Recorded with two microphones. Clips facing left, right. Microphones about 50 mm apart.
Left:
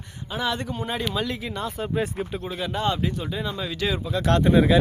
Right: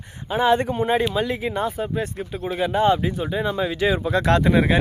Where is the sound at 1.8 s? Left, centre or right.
Centre.